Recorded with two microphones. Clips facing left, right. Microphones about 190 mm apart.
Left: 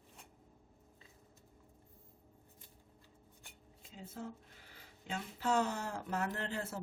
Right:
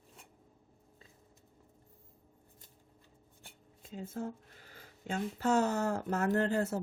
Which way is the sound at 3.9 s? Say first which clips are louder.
Right 7 dB; 50° right (ahead or behind).